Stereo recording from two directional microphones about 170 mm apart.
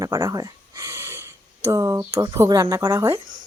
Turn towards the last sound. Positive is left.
turn(degrees=-20)  # may be behind; listen again after turning